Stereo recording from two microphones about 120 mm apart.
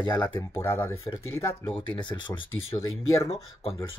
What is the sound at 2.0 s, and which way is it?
Speech, 40° left (ahead or behind).